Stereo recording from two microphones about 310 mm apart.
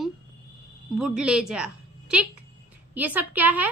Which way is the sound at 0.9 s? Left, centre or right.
Centre.